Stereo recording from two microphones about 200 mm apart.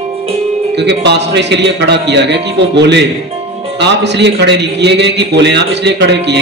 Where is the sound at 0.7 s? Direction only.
55° right (ahead or behind).